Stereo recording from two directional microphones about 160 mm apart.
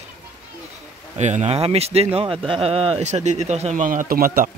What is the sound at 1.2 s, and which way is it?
A man's voice, 45° right (ahead or behind).